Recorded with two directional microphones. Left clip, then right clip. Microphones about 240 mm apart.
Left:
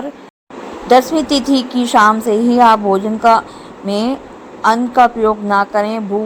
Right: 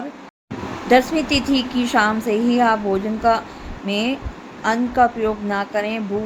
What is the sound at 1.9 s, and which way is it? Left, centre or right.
A woman's voice, centre.